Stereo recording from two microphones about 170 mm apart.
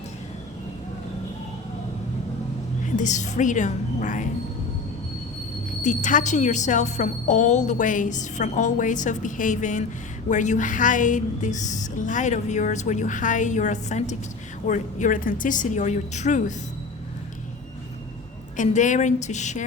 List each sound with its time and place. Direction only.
2.9 s a woman's voice: 45° left (ahead or behind)
5.8 s a woman's voice: 45° left (ahead or behind)
18.5 s a woman's voice: 45° left (ahead or behind)